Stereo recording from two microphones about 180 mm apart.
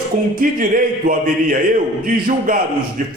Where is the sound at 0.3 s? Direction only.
50° right (ahead or behind).